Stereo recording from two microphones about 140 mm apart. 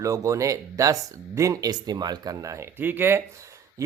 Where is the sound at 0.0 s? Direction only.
25° right (ahead or behind).